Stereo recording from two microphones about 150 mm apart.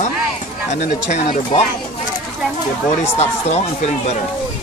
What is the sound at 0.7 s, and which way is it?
Speech, 50° left (ahead or behind).